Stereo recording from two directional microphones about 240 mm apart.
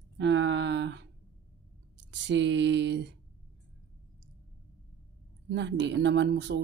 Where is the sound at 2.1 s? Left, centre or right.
Right.